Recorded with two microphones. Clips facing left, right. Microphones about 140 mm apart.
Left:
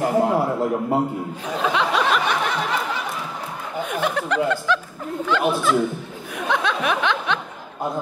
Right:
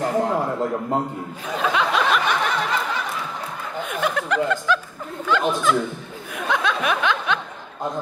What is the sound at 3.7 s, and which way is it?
Chuckle, 10° left (ahead or behind).